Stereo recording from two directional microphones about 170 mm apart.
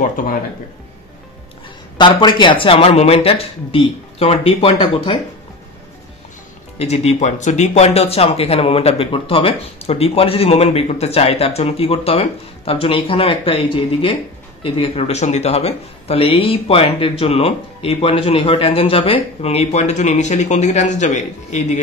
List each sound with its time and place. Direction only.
0.0 s speech: 50° left (ahead or behind)
2.0 s speech: 25° left (ahead or behind)
6.8 s speech: 40° left (ahead or behind)